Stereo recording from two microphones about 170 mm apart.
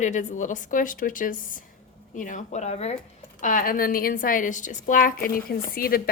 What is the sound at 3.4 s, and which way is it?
A woman's voice, 55° left (ahead or behind).